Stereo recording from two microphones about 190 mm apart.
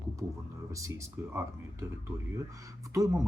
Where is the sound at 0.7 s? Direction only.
15° right (ahead or behind).